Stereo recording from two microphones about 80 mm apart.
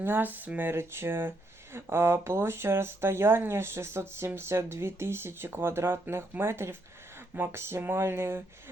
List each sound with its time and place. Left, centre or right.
0.0 s speech: right